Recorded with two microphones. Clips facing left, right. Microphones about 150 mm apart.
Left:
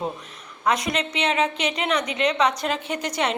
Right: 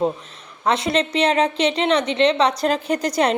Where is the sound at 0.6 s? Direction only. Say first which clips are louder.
Right 4 dB; 30° right (ahead or behind).